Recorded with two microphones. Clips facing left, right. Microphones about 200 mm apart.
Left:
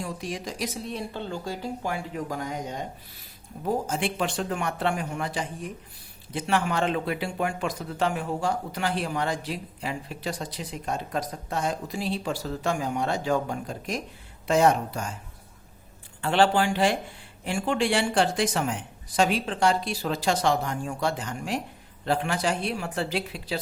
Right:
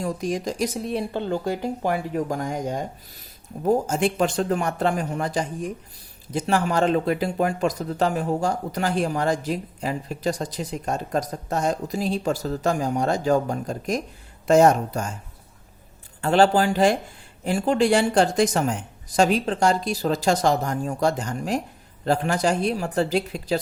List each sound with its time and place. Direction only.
0.0 s speech: 45° right (ahead or behind)
1.6 s a woman's voice: 60° right (ahead or behind)
16.2 s a woman's voice: 40° right (ahead or behind)